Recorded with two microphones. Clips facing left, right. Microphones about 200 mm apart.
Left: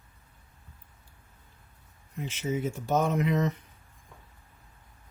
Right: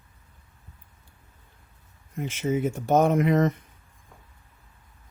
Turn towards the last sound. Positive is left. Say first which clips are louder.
# right 6 dB
turn(degrees=-50)  # may be behind; listen again after turning